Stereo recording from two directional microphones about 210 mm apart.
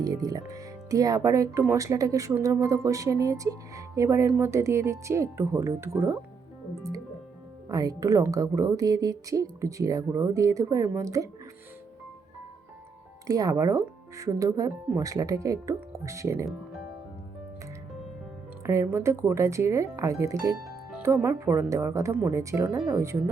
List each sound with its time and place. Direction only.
0.0 s speech: 15° right (ahead or behind)
7.7 s speech: 15° right (ahead or behind)
13.2 s speech: 15° right (ahead or behind)
18.6 s speech: 15° right (ahead or behind)